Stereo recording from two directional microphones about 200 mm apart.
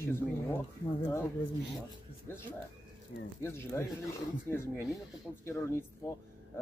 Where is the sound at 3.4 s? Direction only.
10° left (ahead or behind).